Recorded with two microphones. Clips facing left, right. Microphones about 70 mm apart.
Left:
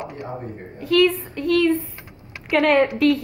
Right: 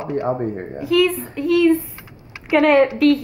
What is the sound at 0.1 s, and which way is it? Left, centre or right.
Speech, right.